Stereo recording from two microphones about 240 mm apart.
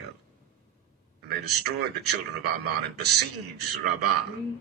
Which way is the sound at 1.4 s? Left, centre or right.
Right.